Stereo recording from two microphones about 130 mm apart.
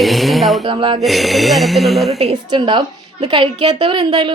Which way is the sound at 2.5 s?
35° right (ahead or behind).